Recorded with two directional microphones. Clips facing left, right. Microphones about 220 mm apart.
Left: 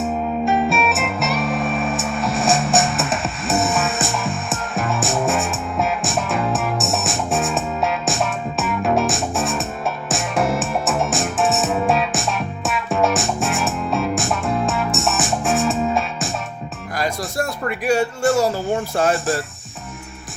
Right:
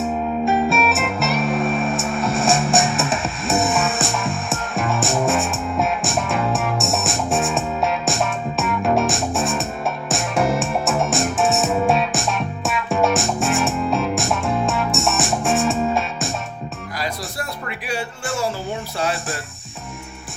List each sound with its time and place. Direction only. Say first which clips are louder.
0.4 s music: even; centre (ahead or behind)
16.9 s music: left 6 dB; 45° left (ahead or behind)